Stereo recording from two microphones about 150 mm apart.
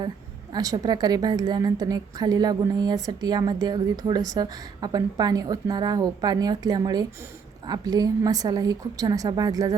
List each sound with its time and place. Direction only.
0.5 s a woman's voice: 25° right (ahead or behind)